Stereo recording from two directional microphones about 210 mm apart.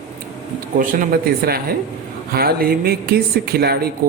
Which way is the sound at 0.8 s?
40° right (ahead or behind).